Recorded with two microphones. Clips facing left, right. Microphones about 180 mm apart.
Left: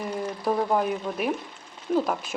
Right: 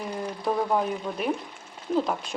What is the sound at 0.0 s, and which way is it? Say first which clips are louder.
Speech: left 2 dB; centre (ahead or behind).